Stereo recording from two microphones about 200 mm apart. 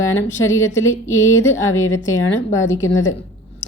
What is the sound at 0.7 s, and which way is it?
Speech, 15° left (ahead or behind).